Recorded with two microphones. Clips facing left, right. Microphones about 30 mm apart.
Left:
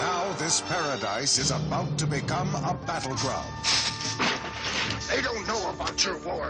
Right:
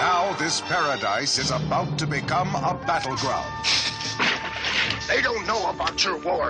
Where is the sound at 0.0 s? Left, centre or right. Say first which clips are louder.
Right 6 dB; right.